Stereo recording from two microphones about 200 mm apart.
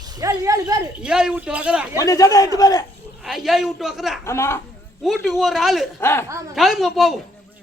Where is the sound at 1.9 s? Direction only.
15° left (ahead or behind).